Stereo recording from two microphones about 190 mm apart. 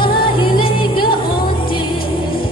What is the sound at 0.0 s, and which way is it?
Music, 25° left (ahead or behind).